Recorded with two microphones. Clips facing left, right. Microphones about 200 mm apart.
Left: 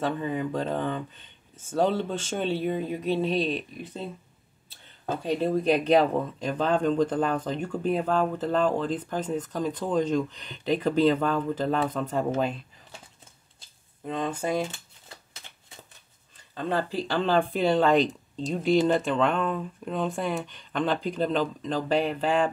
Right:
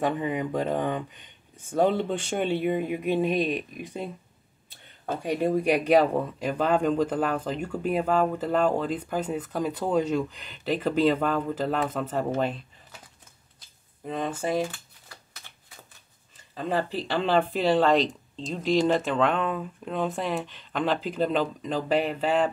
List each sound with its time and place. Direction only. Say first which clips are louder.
0.0 s speech: right 1 dB; 15° right (ahead or behind)
5.2 s speech: right 1 dB; 15° right (ahead or behind)
14.0 s speech: even; 5° right (ahead or behind)
14.7 s shuffling cards: left 1 dB; 25° left (ahead or behind)
16.5 s speech: even; 5° right (ahead or behind)